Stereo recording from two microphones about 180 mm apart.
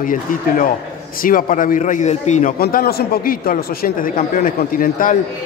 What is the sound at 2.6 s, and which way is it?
A man's voice, 60° left (ahead or behind).